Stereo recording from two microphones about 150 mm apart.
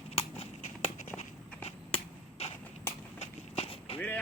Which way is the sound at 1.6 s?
40° left (ahead or behind).